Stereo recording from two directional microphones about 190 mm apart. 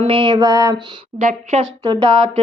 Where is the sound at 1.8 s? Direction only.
25° right (ahead or behind).